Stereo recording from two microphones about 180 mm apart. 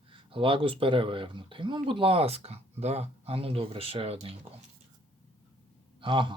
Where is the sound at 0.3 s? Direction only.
30° right (ahead or behind).